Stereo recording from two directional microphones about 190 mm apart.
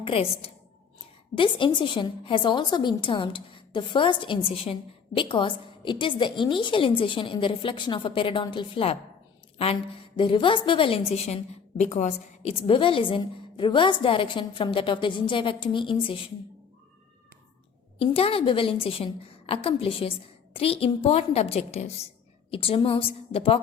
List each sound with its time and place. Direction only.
0.0 s a woman's voice: 30° left (ahead or behind)
18.0 s a woman's voice: 30° left (ahead or behind)